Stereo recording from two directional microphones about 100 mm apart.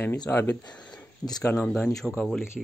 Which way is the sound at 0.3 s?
20° left (ahead or behind).